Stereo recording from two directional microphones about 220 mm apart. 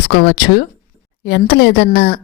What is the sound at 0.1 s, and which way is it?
Speech, 50° left (ahead or behind).